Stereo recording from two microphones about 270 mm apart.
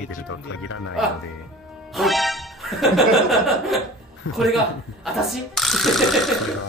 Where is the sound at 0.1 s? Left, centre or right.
Left.